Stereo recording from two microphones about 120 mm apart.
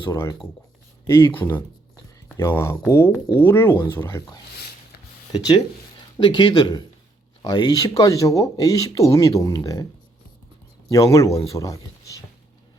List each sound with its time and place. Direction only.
1.0 s speech: 25° left (ahead or behind)
6.1 s speech: 45° left (ahead or behind)
10.9 s speech: 25° left (ahead or behind)